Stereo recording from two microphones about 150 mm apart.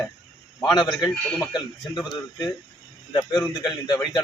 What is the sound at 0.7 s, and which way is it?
A man's voice, 25° left (ahead or behind).